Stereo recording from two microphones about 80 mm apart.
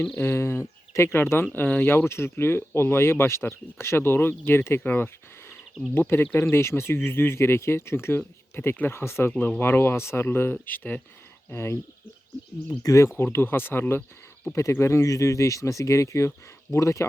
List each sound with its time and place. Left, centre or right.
0.2 s speech: left
11.4 s speech: left
12.8 s speech: left
13.1 s speech: left